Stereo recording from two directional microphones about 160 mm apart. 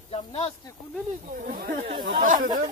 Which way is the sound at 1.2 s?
60° right (ahead or behind).